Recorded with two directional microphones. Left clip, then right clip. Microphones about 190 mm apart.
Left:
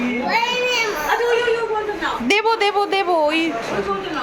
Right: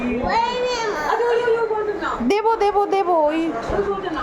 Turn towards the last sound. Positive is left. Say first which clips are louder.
# even
turn(degrees=-10)  # may be behind; listen again after turning